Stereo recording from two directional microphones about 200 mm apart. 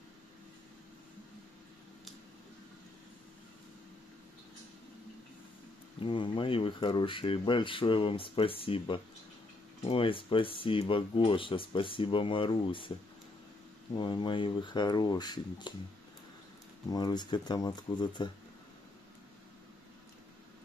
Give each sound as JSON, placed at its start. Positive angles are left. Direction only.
{"t": 5.9, "sound": "speech", "side_deg": 25}
{"t": 13.9, "sound": "speech", "side_deg": 25}
{"t": 16.9, "sound": "speech", "side_deg": 20}